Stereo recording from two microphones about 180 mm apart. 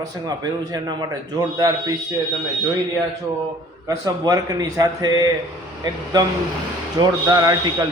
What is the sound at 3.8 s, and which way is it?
Speech, 20° right (ahead or behind).